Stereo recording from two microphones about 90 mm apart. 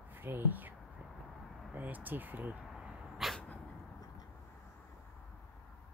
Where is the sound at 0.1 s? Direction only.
25° right (ahead or behind).